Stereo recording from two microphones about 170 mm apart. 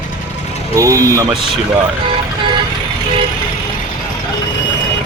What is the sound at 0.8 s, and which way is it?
Speech, 20° right (ahead or behind).